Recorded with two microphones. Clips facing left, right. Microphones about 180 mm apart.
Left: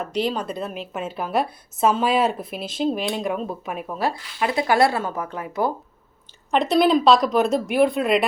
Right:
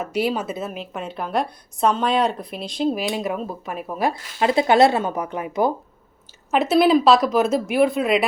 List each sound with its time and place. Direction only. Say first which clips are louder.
0.0 s a woman's voice: right 1 dB; 5° right (ahead or behind)
3.9 s speech: right 2 dB; 15° right (ahead or behind)
4.4 s speech: right 4 dB; 25° right (ahead or behind)
6.5 s a woman's voice: right 2 dB; 5° right (ahead or behind)